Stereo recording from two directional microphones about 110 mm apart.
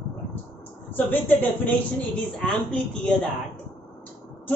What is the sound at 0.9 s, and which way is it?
A woman's voice, 15° left (ahead or behind).